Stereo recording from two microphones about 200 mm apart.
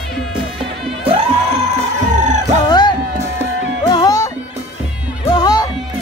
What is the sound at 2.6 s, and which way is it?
Music, 20° left (ahead or behind).